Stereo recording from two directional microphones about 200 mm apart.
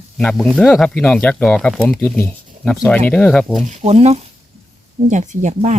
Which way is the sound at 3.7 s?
35° right (ahead or behind).